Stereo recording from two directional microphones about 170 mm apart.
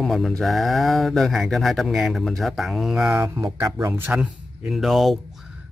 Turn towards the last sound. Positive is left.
turn(degrees=0)  # may be behind; listen again after turning